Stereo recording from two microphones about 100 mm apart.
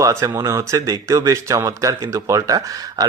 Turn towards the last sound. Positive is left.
turn(degrees=-35)  # may be behind; listen again after turning